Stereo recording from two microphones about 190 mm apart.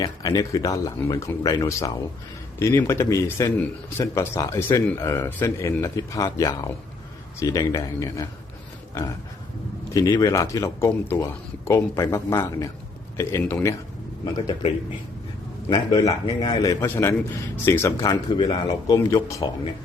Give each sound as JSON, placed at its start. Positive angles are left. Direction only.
{"t": 0.0, "sound": "speech", "side_deg": 20}
{"t": 9.9, "sound": "speech", "side_deg": 20}
{"t": 15.7, "sound": "speech", "side_deg": 20}
{"t": 16.8, "sound": "speech", "side_deg": 10}